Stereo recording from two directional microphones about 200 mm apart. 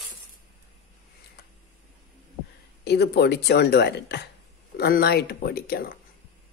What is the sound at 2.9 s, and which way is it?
Speech, 55° left (ahead or behind).